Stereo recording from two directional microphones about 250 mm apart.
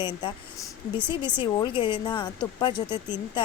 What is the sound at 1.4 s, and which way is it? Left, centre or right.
Speech, centre.